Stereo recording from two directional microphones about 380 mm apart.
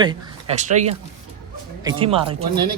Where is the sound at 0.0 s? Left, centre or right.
Centre.